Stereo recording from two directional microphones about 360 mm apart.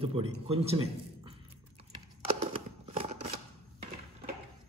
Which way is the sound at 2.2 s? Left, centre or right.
Centre.